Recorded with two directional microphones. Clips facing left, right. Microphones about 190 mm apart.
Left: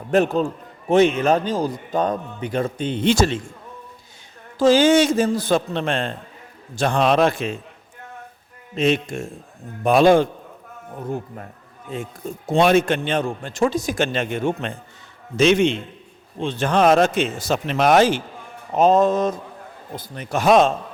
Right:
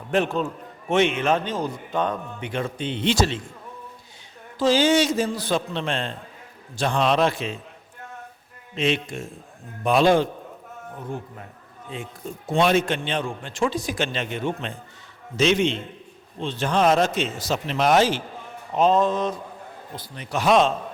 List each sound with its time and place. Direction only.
0.1 s a man's voice: 40° left (ahead or behind)
4.5 s a man's voice: 50° left (ahead or behind)
8.7 s a man's voice: 45° left (ahead or behind)
11.9 s a man's voice: 45° left (ahead or behind)